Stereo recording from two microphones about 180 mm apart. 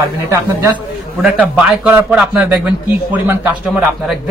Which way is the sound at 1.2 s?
5° right (ahead or behind).